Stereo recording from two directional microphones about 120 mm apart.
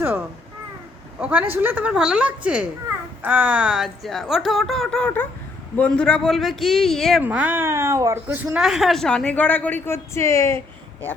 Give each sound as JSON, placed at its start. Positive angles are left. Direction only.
{"t": 1.2, "sound": "a woman's voice", "side_deg": -15}
{"t": 7.2, "sound": "speech", "side_deg": -15}
{"t": 8.6, "sound": "speech", "side_deg": -5}